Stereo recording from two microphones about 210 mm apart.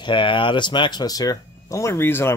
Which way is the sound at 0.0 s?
25° left (ahead or behind).